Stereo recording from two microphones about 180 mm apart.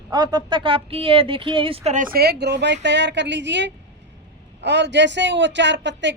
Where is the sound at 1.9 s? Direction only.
50° right (ahead or behind).